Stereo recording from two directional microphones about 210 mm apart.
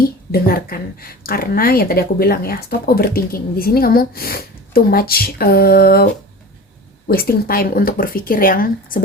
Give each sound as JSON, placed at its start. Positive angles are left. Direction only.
{"t": 0.0, "sound": "a woman's voice", "side_deg": 45}
{"t": 7.1, "sound": "a woman's voice", "side_deg": 45}